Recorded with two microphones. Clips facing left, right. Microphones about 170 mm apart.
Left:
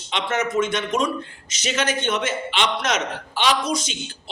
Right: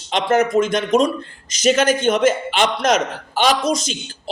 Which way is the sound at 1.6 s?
45° right (ahead or behind).